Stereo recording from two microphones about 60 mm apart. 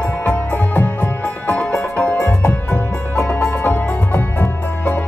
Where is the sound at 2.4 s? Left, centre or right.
Left.